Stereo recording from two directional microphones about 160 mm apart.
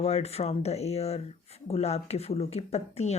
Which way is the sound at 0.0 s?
40° left (ahead or behind).